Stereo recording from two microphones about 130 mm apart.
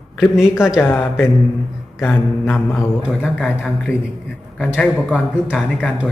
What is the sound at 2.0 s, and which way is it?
Speech, 20° left (ahead or behind).